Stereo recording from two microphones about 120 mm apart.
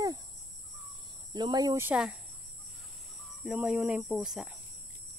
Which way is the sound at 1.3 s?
35° right (ahead or behind).